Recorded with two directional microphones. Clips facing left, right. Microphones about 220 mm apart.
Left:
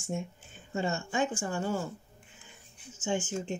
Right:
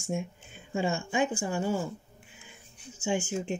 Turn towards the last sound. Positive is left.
turn(degrees=-10)  # may be behind; listen again after turning